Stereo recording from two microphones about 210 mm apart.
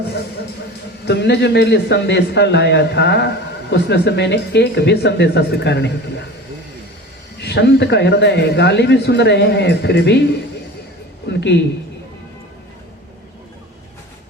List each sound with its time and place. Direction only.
1.0 s a man's voice: 55° left (ahead or behind)
7.4 s a man's voice: 55° left (ahead or behind)
11.3 s a man's voice: 55° left (ahead or behind)